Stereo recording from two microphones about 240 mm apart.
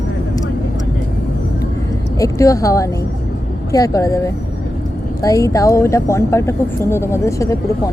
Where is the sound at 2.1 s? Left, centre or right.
Centre.